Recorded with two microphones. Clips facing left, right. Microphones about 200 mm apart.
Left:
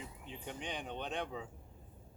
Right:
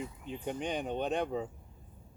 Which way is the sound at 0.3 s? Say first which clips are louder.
Right 8 dB; 45° right (ahead or behind).